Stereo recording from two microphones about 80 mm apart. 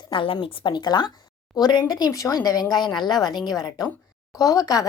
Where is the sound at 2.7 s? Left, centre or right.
Left.